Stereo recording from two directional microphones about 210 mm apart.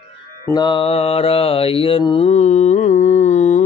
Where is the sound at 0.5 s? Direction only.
20° left (ahead or behind).